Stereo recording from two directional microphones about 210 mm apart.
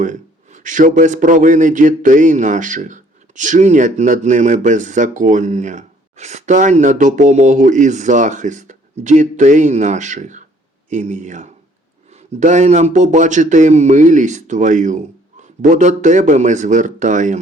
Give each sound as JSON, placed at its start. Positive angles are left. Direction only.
{"t": 0.0, "sound": "a man's voice", "side_deg": -35}